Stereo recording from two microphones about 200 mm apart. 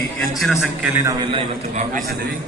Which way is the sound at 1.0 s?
25° right (ahead or behind).